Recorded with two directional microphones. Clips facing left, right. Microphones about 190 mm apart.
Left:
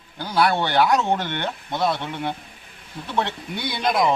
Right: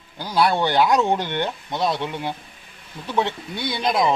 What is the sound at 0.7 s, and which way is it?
Speech, 15° right (ahead or behind).